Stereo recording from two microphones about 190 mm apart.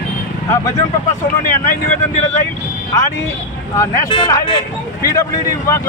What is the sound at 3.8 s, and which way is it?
Speech, 15° left (ahead or behind).